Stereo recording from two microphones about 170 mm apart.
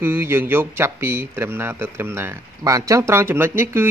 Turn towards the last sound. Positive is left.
turn(degrees=-15)  # may be behind; listen again after turning